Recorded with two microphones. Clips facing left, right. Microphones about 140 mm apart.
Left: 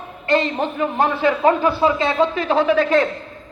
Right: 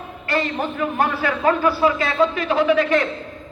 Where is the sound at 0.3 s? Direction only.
25° left (ahead or behind).